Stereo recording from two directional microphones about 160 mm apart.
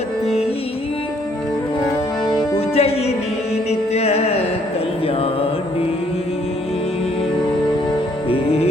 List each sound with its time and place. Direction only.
2.6 s music: 40° left (ahead or behind)
5.0 s mantra: 35° left (ahead or behind)
8.3 s music: 40° left (ahead or behind)